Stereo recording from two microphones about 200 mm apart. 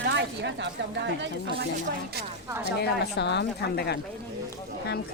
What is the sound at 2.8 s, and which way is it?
A woman's voice, 60° left (ahead or behind).